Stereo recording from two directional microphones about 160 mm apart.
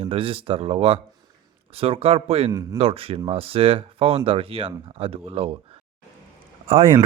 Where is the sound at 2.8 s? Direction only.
35° right (ahead or behind).